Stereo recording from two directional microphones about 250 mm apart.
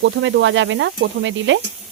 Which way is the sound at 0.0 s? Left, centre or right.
Right.